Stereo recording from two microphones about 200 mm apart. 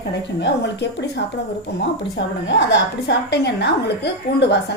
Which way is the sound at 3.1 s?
55° left (ahead or behind).